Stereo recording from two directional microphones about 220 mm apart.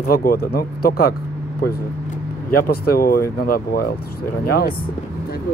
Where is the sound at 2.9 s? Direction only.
40° left (ahead or behind).